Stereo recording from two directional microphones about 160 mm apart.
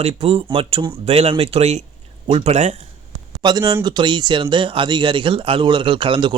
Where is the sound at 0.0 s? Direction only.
40° right (ahead or behind).